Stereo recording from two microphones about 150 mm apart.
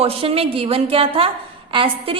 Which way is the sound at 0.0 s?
40° right (ahead or behind).